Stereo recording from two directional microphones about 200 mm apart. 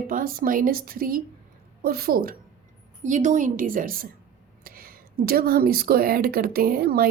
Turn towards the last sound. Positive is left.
turn(degrees=-50)  # may be behind; listen again after turning